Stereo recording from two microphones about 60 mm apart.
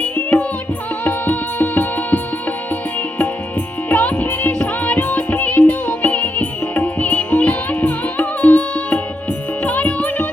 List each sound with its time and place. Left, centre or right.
0.0 s music: left
3.8 s music: left